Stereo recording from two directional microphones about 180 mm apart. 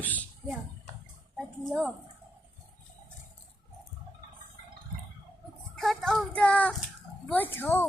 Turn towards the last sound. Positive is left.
turn(degrees=10)  # may be behind; listen again after turning